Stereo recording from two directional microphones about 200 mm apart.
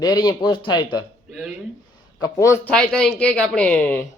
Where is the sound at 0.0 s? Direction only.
20° left (ahead or behind).